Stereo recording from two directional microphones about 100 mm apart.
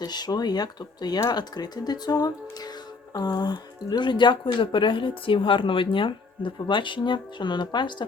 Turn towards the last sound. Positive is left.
turn(degrees=50)  # may be behind; listen again after turning